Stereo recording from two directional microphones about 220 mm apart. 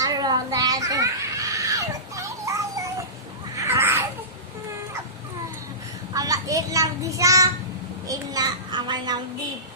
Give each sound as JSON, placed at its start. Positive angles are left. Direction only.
{"t": 0.0, "sound": "children playing", "side_deg": -15}
{"t": 3.5, "sound": "a sound", "side_deg": -15}
{"t": 6.1, "sound": "child singing", "side_deg": -15}